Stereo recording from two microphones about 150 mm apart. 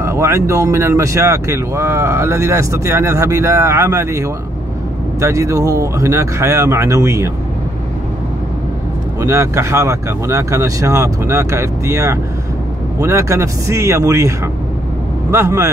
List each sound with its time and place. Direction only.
0.0 s speech: 20° right (ahead or behind)
9.2 s speech: 20° right (ahead or behind)